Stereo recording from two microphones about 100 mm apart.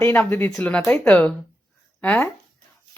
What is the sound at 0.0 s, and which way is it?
A woman's voice, 20° left (ahead or behind).